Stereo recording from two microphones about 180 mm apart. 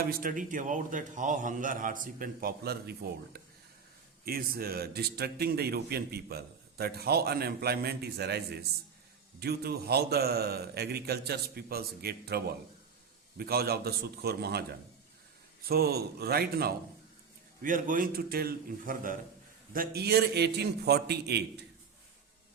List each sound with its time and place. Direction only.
0.0 s a man's voice: 50° right (ahead or behind)
15.6 s a man's voice: 60° right (ahead or behind)
17.6 s a man's voice: 50° right (ahead or behind); by 21.6 s 65° right (ahead or behind)